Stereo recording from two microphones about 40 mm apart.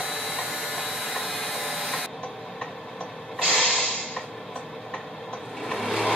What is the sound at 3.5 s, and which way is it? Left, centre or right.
Mechanisms, left.